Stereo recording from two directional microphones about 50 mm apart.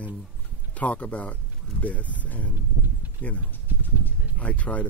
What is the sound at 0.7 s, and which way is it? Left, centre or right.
Speech, left.